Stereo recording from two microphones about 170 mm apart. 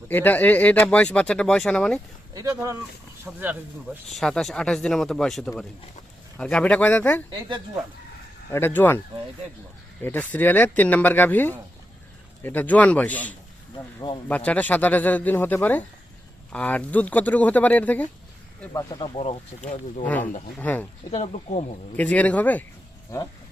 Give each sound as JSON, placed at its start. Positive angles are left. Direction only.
{"t": 0.1, "sound": "speech", "side_deg": 10}
{"t": 2.3, "sound": "speech", "side_deg": -20}
{"t": 4.1, "sound": "speech", "side_deg": 0}
{"t": 8.5, "sound": "speech", "side_deg": 10}
{"t": 10.0, "sound": "speech", "side_deg": 10}
{"t": 18.7, "sound": "speech", "side_deg": 20}
{"t": 19.1, "sound": "speech", "side_deg": 35}
{"t": 20.1, "sound": "speech", "side_deg": 10}
{"t": 21.1, "sound": "speech", "side_deg": 40}
{"t": 21.9, "sound": "speech", "side_deg": 10}